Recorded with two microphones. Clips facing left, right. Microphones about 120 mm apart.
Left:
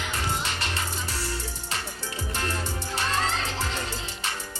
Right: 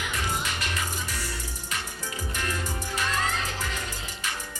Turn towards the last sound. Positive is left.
turn(degrees=30)  # may be behind; listen again after turning